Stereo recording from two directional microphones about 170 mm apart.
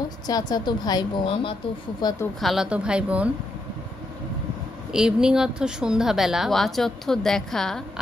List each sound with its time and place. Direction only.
0.3 s a woman's voice: 25° left (ahead or behind)
2.4 s a woman's voice: 5° right (ahead or behind)
4.9 s a woman's voice: 5° right (ahead or behind)